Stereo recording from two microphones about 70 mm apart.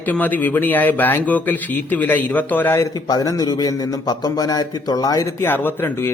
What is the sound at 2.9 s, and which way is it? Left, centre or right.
Speech, left.